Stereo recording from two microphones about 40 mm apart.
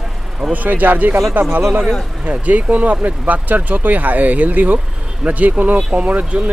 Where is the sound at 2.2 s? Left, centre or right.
Right.